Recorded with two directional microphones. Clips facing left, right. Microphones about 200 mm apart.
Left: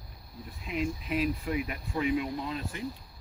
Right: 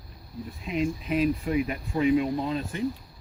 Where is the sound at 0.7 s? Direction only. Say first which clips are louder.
Right 4 dB; 25° right (ahead or behind).